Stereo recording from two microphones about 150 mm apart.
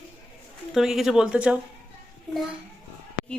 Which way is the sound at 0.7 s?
Centre (ahead or behind).